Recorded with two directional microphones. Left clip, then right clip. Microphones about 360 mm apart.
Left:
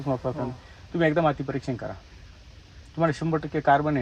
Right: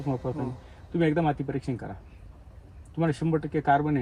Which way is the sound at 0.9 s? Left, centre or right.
Centre.